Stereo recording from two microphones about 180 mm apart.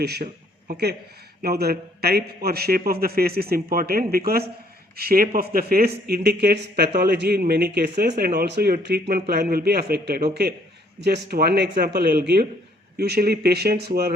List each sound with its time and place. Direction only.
0.0 s speech: 65° right (ahead or behind)